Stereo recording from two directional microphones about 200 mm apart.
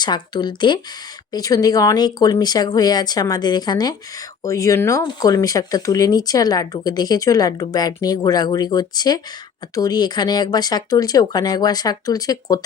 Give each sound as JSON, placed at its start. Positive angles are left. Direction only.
{"t": 0.0, "sound": "speech", "side_deg": 20}